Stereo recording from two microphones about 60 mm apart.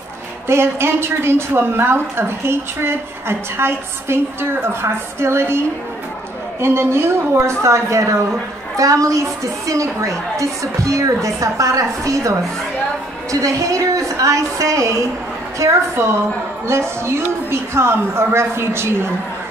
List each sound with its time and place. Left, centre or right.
0.5 s a woman's voice: right
6.6 s a woman's voice: right
15.6 s a woman's voice: right